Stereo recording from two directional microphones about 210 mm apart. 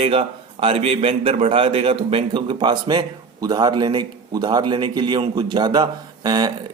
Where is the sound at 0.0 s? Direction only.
25° right (ahead or behind).